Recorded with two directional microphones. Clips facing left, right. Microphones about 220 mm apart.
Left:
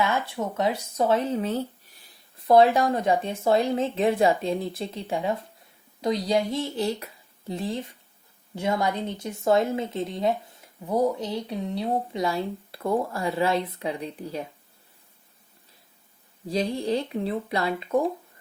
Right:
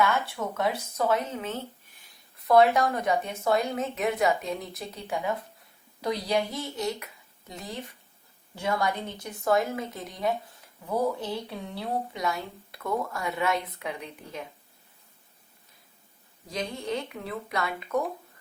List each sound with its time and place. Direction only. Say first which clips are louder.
0.0 s speech: left 1 dB; 20° left (ahead or behind)
16.5 s speech: left 7 dB; 30° left (ahead or behind)